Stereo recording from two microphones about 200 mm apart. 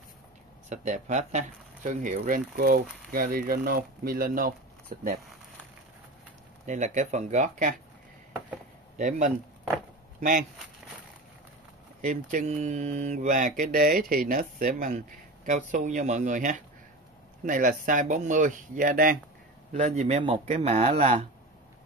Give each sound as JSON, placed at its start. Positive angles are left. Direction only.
{"t": 0.7, "sound": "speech", "side_deg": -35}
{"t": 6.6, "sound": "speech", "side_deg": -35}
{"t": 8.9, "sound": "speech", "side_deg": -40}
{"t": 12.0, "sound": "speech", "side_deg": -40}